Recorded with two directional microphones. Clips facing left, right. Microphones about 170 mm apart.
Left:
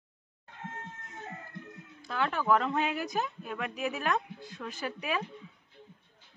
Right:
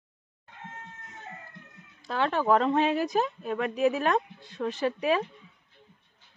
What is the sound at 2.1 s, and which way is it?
Speech, 35° right (ahead or behind).